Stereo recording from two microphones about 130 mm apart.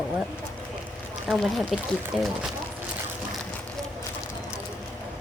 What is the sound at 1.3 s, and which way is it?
Speech, centre (ahead or behind).